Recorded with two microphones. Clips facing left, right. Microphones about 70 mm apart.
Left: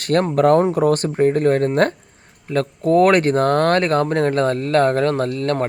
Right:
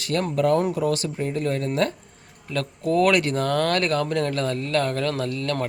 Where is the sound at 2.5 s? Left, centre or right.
Left.